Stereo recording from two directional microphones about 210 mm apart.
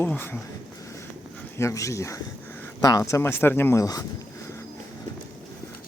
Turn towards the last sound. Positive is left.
turn(degrees=15)  # may be behind; listen again after turning